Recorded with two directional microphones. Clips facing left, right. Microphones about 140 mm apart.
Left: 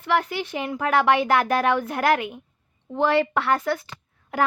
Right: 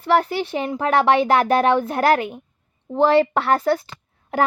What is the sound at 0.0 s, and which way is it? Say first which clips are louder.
Speech: right 5 dB; 35° right (ahead or behind).